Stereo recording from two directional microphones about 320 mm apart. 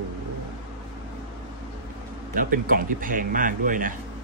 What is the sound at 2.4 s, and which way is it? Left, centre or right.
A man's voice, right.